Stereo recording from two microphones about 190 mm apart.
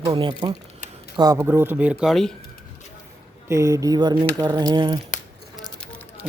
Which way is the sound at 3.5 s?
15° right (ahead or behind).